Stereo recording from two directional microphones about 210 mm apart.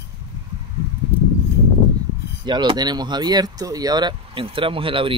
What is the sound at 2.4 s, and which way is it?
Speech, 20° right (ahead or behind).